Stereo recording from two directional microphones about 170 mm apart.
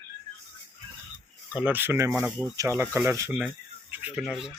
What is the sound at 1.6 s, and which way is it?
Speech, 10° right (ahead or behind).